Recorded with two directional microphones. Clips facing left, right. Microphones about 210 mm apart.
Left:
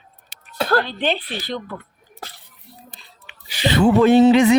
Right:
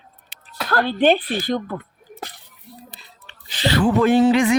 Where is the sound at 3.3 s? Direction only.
10° left (ahead or behind).